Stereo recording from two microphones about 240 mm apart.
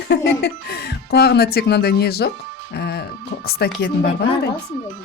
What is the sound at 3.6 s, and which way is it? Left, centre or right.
Speech, left.